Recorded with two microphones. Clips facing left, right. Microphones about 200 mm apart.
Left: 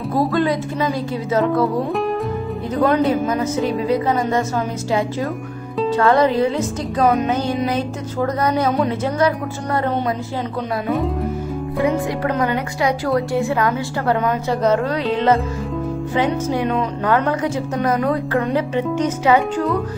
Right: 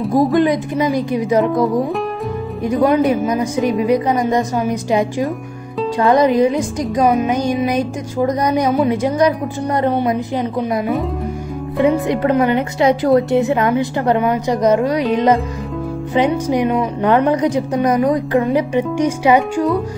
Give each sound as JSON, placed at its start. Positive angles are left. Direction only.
{"t": 0.1, "sound": "a woman's voice", "side_deg": -15}
{"t": 11.8, "sound": "a woman's voice", "side_deg": -20}